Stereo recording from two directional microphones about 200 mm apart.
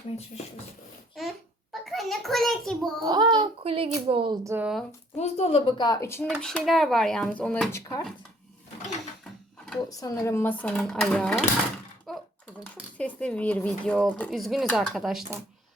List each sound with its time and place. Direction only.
1.2 s a sound: centre (ahead or behind)
3.0 s a child's voice: 20° right (ahead or behind)
4.4 s speech: 10° right (ahead or behind)
5.1 s a woman's voice: 35° left (ahead or behind); by 6.3 s 10° left (ahead or behind)
6.3 s speech: centre (ahead or behind)
10.0 s speech: 15° left (ahead or behind)
12.1 s a sound: centre (ahead or behind)
13.0 s speech: 5° left (ahead or behind)